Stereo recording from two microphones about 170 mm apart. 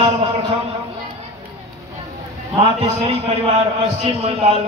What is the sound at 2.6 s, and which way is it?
A man's voice, 35° right (ahead or behind).